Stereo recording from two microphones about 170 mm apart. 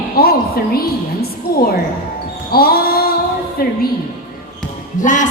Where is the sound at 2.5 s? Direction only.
60° left (ahead or behind).